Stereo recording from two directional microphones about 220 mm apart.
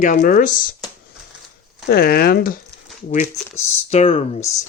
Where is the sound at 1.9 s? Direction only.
45° left (ahead or behind).